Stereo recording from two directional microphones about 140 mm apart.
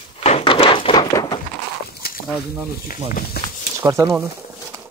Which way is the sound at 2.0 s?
90° left.